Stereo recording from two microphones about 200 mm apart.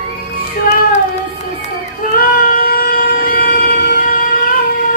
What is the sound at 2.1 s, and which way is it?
Music, 45° left (ahead or behind).